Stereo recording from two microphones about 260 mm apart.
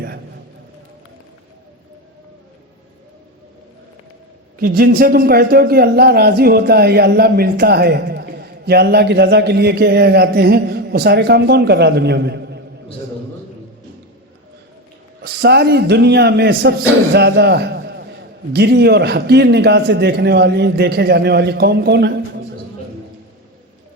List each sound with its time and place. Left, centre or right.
4.6 s a man's voice: right
15.2 s a man's voice: right